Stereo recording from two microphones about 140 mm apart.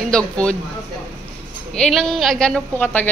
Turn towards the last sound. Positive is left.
turn(degrees=10)  # may be behind; listen again after turning